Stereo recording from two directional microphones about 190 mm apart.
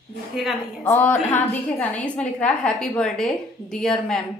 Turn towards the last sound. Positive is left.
turn(degrees=5)  # may be behind; listen again after turning